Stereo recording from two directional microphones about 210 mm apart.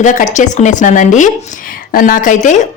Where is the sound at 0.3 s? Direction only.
35° left (ahead or behind).